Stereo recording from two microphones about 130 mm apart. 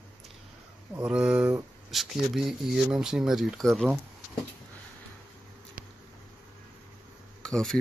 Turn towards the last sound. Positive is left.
turn(degrees=5)  # may be behind; listen again after turning